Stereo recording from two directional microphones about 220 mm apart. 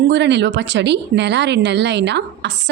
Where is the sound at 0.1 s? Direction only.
50° right (ahead or behind).